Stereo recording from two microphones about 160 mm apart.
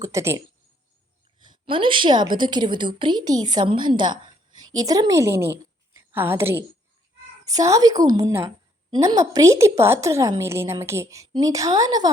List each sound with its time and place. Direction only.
0.0 s a woman's voice: 20° right (ahead or behind)
1.4 s a woman's voice: 30° right (ahead or behind)